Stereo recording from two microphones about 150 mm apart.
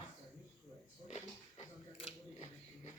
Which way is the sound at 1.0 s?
50° left (ahead or behind).